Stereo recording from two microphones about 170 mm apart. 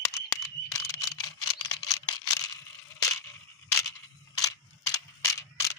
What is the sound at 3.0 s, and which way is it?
Crushing, 15° left (ahead or behind).